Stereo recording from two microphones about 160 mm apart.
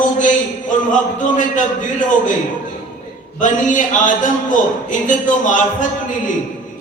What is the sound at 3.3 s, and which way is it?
A man's voice, 55° left (ahead or behind).